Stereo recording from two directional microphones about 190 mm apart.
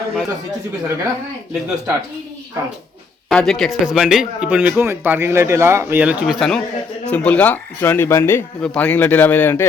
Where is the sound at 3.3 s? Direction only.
Centre (ahead or behind).